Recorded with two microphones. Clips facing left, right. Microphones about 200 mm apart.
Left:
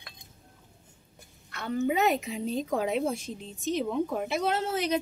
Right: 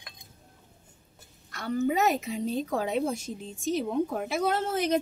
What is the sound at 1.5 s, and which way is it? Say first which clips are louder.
A woman's voice: right 1 dB; 40° right (ahead or behind).